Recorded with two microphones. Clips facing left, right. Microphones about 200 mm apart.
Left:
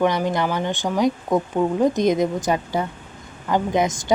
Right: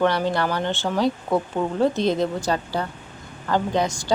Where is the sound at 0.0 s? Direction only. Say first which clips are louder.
Left 1 dB; 15° left (ahead or behind).